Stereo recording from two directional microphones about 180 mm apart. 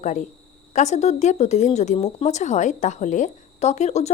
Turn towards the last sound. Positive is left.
turn(degrees=40)  # may be behind; listen again after turning